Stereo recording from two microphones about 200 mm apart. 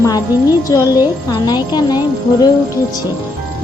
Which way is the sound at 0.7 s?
20° left (ahead or behind).